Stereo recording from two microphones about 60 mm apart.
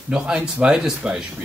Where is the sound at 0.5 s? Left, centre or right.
Centre.